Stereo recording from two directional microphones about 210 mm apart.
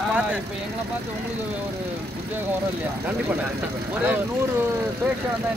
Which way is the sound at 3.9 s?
10° right (ahead or behind).